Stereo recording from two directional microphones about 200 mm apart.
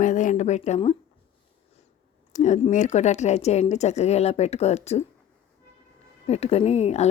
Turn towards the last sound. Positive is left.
turn(degrees=35)  # may be behind; listen again after turning